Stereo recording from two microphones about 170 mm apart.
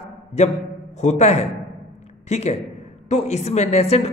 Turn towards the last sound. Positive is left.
turn(degrees=40)  # may be behind; listen again after turning